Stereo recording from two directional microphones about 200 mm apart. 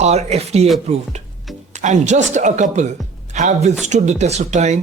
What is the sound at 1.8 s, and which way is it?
Speech, 35° right (ahead or behind).